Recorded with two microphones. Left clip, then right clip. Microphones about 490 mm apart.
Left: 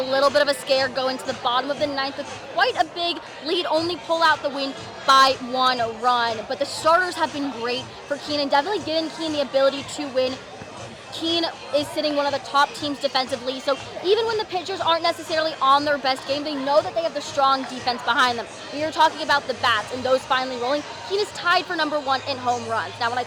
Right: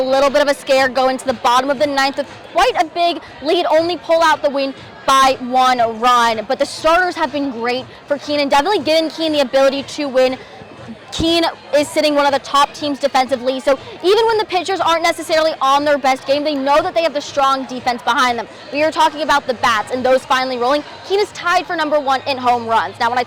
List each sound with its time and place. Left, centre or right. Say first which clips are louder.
0.0 s a woman's voice: right 6 dB; right
2.6 s a woman's voice: right 7 dB; right
11.1 s a woman's voice: right 8 dB; right
17.3 s a woman's voice: right 2 dB; right